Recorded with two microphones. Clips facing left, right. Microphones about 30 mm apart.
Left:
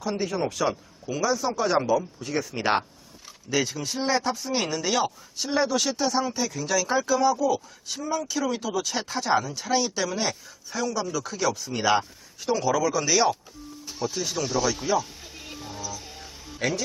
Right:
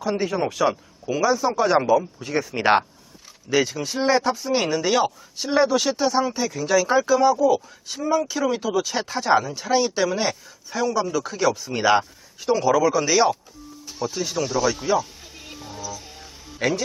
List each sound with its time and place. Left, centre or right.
0.0 s speech: centre
8.0 s speech: right
13.8 s a sound: centre
16.6 s speech: centre